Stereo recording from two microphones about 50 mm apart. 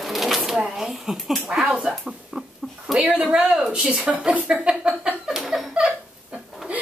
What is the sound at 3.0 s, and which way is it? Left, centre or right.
Speech, right.